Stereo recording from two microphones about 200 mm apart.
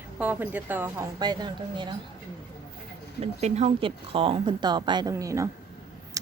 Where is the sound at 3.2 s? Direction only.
35° right (ahead or behind); by 5.5 s 15° right (ahead or behind).